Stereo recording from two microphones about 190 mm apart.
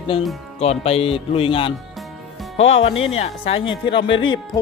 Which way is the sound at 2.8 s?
30° left (ahead or behind).